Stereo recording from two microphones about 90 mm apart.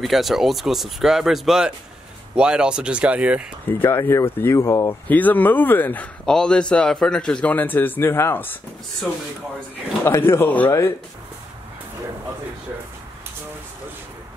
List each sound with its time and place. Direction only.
0.0 s speech: centre (ahead or behind)
3.8 s speech: 30° left (ahead or behind)
5.0 s speech: 20° left (ahead or behind)
6.2 s a man's voice: 10° left (ahead or behind); by 8.5 s 25° left (ahead or behind)
10.0 s speech: 25° left (ahead or behind)